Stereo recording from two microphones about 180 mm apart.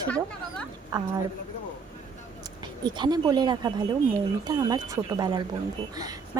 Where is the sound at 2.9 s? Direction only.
25° right (ahead or behind).